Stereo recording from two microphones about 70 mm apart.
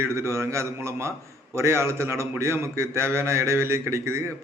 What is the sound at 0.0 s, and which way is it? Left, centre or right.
A man's voice, right.